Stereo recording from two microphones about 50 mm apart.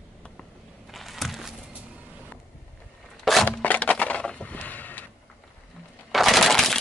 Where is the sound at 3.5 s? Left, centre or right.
Left.